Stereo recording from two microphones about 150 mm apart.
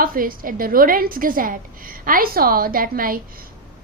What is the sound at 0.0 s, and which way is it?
A woman's voice, 70° right (ahead or behind).